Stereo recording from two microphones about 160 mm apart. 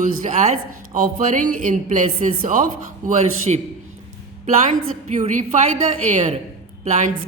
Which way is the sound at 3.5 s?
40° right (ahead or behind).